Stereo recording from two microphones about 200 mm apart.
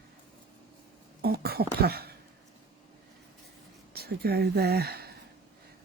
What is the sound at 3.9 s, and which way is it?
Speech, 50° right (ahead or behind).